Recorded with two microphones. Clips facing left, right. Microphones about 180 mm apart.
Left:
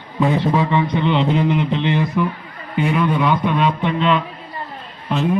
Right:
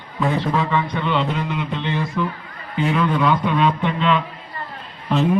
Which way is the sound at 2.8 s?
10° left (ahead or behind).